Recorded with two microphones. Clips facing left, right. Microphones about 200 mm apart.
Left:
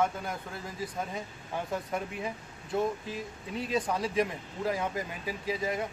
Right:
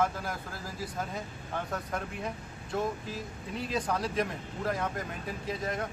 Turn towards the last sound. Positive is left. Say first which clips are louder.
# left 2 dB
turn(degrees=5)  # may be behind; listen again after turning